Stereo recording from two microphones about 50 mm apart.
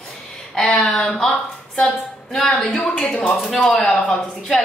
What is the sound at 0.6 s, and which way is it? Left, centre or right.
Speech, centre.